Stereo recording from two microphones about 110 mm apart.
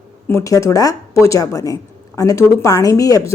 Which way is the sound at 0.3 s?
25° left (ahead or behind).